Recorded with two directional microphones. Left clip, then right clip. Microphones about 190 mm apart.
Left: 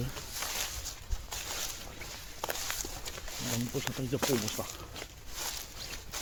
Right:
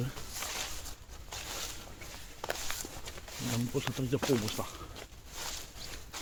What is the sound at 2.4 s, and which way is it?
Walk, 60° left (ahead or behind).